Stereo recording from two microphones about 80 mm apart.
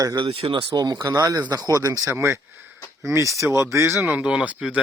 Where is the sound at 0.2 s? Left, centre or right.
Right.